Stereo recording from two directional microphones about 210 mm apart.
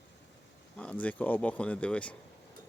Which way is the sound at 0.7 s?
5° left (ahead or behind).